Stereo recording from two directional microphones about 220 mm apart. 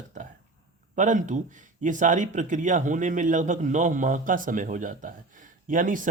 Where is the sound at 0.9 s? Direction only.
35° right (ahead or behind).